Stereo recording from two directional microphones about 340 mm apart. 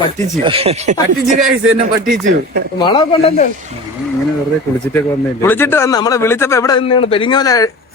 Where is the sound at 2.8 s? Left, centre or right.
Centre.